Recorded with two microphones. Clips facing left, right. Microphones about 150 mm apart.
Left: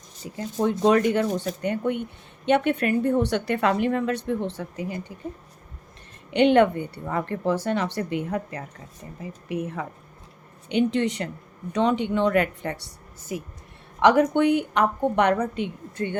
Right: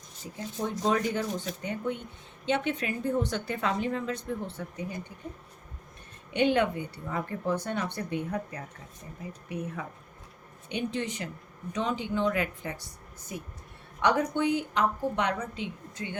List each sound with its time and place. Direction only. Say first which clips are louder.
0.6 s a woman's voice: left 8 dB; 70° left (ahead or behind); by 4.9 s 90° left
6.3 s speech: left 7 dB; 70° left (ahead or behind); by 9.8 s 90° left
10.7 s a woman's voice: left 10 dB; 75° left (ahead or behind); by 16.1 s 55° left (ahead or behind)